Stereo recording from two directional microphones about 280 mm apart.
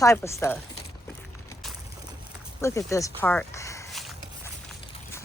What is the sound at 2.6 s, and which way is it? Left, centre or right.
Speech, centre.